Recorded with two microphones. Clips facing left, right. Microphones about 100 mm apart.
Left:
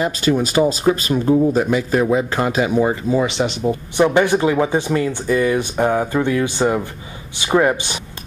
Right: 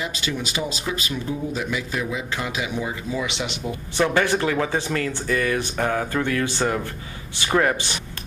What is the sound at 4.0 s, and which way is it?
Speech, 20° left (ahead or behind).